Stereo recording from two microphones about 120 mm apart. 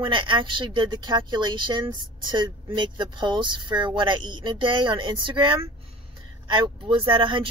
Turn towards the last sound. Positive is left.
turn(degrees=-45)  # may be behind; listen again after turning